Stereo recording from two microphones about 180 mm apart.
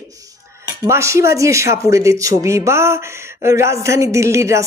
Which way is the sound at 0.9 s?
15° right (ahead or behind).